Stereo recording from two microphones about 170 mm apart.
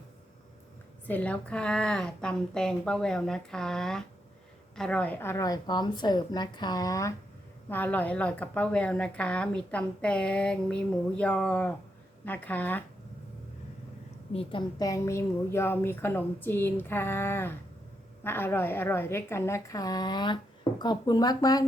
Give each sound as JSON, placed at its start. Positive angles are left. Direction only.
{"t": 1.0, "sound": "a woman's voice", "side_deg": 10}
{"t": 7.7, "sound": "a woman's voice", "side_deg": 10}
{"t": 14.3, "sound": "a woman's voice", "side_deg": 25}